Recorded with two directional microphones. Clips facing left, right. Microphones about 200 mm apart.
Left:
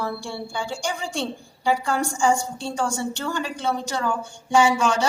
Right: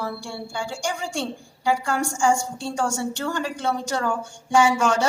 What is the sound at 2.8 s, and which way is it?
A woman's voice, 50° right (ahead or behind).